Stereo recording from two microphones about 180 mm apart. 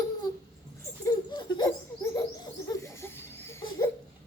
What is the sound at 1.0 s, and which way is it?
Laughter, 25° left (ahead or behind).